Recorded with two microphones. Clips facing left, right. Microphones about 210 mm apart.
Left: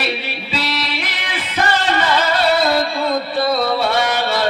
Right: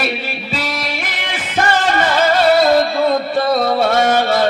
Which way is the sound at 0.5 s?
45° right (ahead or behind).